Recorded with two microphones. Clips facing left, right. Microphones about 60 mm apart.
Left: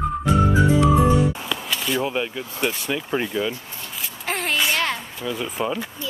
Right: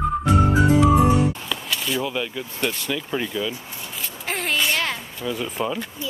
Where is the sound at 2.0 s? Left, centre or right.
Centre.